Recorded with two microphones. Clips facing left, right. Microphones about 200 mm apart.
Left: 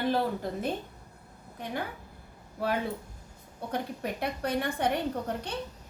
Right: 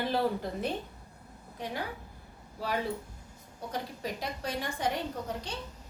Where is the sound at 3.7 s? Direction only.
60° left (ahead or behind).